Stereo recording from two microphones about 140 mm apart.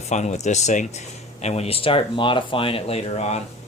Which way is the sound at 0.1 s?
55° left (ahead or behind).